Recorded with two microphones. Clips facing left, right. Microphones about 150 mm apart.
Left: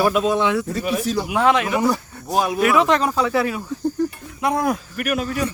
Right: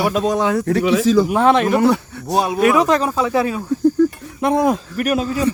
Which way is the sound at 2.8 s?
35° right (ahead or behind).